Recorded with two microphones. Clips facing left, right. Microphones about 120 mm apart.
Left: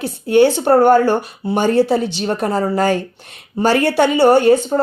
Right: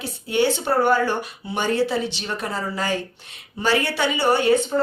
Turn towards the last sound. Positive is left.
turn(degrees=45)  # may be behind; listen again after turning